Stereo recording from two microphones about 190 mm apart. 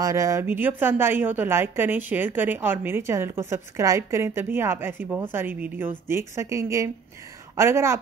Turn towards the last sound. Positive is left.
turn(degrees=-15)  # may be behind; listen again after turning